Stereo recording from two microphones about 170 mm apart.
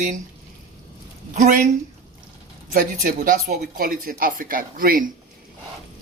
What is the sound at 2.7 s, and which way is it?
Speech, 50° right (ahead or behind).